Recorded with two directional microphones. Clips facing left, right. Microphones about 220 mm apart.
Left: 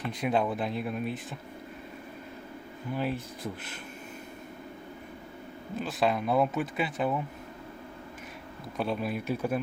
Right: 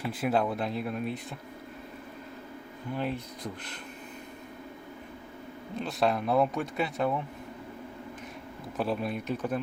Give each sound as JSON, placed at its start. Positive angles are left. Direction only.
{"t": 0.0, "sound": "speech", "side_deg": -5}
{"t": 2.9, "sound": "speech", "side_deg": 5}
{"t": 5.7, "sound": "speech", "side_deg": 0}
{"t": 8.8, "sound": "speech", "side_deg": 0}